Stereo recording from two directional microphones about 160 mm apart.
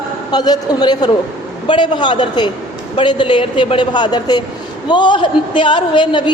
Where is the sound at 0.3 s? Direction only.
25° left (ahead or behind).